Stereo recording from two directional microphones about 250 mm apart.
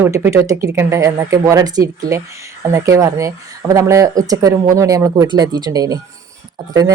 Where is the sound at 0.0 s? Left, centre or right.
Centre.